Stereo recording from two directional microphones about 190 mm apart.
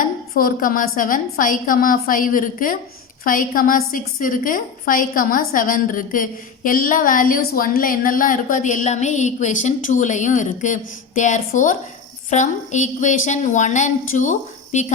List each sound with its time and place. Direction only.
0.0 s a woman's voice: 45° left (ahead or behind)